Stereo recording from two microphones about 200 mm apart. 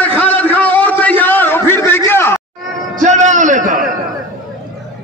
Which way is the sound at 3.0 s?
35° right (ahead or behind).